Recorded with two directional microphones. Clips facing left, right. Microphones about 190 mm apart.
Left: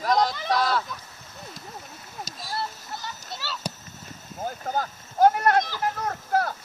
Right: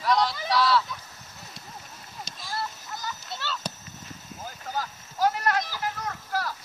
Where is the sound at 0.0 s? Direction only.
45° left (ahead or behind).